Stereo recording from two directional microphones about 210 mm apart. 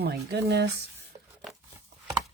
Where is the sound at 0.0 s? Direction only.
50° right (ahead or behind).